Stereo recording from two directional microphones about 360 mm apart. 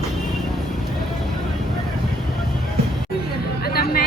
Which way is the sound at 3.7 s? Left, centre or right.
Left.